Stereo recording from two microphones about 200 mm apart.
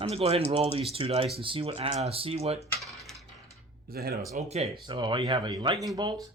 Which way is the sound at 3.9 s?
50° right (ahead or behind).